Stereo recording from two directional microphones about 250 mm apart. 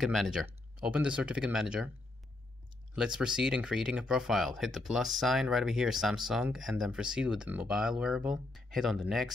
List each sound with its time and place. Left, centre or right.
0.0 s speech: centre
2.9 s speech: centre